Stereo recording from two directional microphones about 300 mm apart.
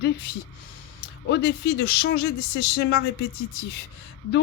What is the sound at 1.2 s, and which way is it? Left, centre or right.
Speech, left.